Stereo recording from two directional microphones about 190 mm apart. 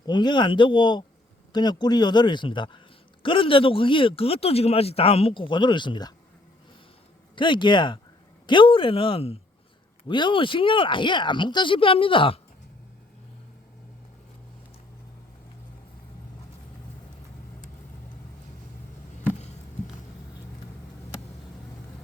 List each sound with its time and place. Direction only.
0.0 s speech: 25° left (ahead or behind)
7.3 s speech: 25° left (ahead or behind)